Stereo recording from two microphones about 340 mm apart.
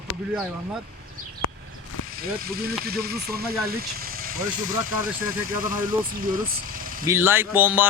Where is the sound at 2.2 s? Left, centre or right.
Right.